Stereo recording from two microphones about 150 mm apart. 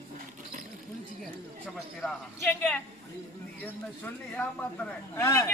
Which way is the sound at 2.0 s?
15° left (ahead or behind).